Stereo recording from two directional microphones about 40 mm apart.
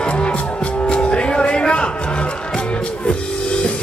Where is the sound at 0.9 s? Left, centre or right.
Left.